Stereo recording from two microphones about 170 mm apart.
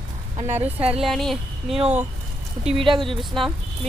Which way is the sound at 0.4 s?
40° right (ahead or behind).